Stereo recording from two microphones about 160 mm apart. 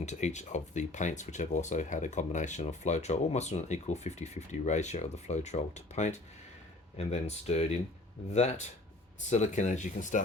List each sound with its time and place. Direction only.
0.0 s speech: 45° left (ahead or behind)